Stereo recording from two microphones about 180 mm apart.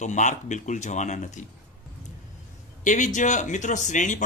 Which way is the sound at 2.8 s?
45° left (ahead or behind).